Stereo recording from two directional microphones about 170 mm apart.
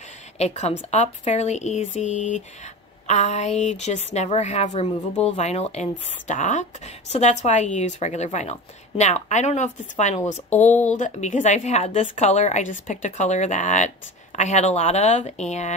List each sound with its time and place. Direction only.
0.4 s a woman's voice: 40° left (ahead or behind)